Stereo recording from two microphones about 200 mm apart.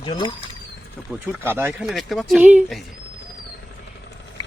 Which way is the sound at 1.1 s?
10° right (ahead or behind).